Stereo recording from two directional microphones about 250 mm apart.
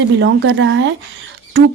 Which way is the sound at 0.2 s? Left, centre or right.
Right.